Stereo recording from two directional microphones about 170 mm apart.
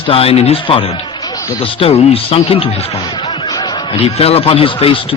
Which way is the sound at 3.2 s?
35° left (ahead or behind).